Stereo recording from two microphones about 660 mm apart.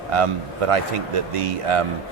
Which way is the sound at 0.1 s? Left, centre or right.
Right.